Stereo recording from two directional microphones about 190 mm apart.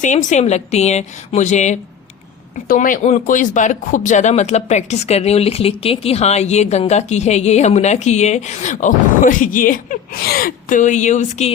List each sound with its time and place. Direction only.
0.0 s speech: 40° left (ahead or behind)